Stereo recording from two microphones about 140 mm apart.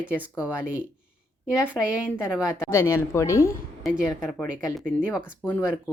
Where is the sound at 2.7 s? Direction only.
20° left (ahead or behind).